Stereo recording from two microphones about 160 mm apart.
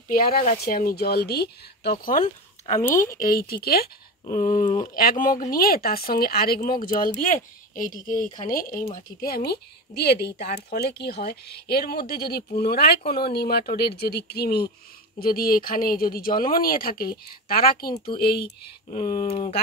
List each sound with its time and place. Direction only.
0.1 s a woman's voice: 65° left (ahead or behind)
4.3 s speech: 50° left (ahead or behind)
9.2 s speech: 75° left (ahead or behind)
15.1 s speech: 65° left (ahead or behind)
18.1 s a woman's voice: 80° left
18.9 s speech: 45° left (ahead or behind)